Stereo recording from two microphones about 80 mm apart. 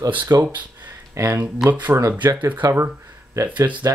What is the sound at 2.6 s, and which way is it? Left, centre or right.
Speech, right.